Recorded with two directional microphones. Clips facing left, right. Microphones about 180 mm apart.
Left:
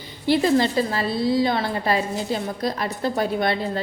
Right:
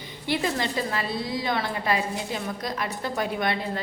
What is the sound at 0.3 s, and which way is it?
A woman's voice, 30° left (ahead or behind).